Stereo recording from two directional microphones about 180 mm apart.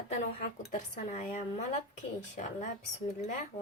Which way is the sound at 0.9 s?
40° left (ahead or behind).